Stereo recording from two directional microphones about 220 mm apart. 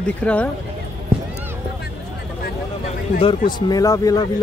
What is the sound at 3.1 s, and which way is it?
Speech, 20° left (ahead or behind).